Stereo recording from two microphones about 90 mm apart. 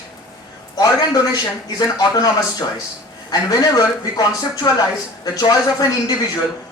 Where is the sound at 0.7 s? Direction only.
45° left (ahead or behind).